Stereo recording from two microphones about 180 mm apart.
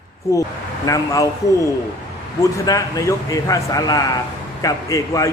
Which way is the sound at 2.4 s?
15° left (ahead or behind).